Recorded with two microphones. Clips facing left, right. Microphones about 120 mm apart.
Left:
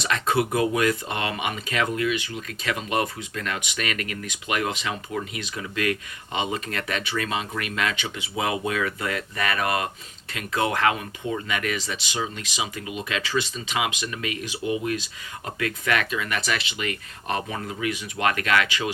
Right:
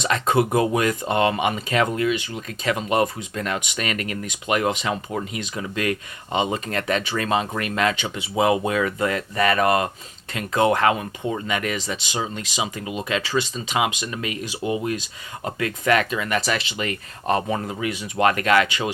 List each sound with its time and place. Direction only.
0.1 s speech: 30° right (ahead or behind)